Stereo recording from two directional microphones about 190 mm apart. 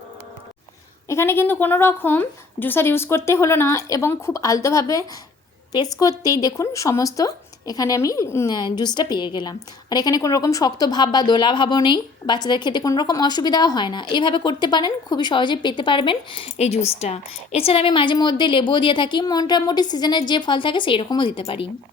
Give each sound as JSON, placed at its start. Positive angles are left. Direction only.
{"t": 1.0, "sound": "a woman's voice", "side_deg": 15}